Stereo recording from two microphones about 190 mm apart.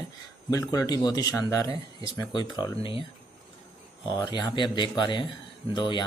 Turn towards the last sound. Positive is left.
turn(degrees=25)  # may be behind; listen again after turning